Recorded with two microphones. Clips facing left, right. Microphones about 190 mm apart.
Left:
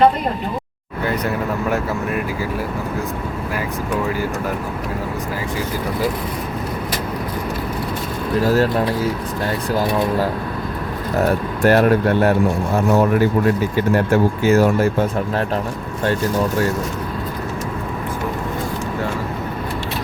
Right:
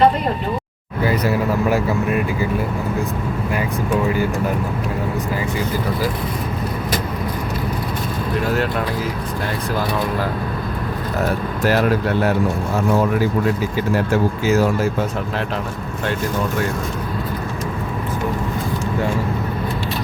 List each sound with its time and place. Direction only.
8.4 s speech: 35° left (ahead or behind)
11.6 s speech: 55° left (ahead or behind)
13.7 s speech: 60° left (ahead or behind)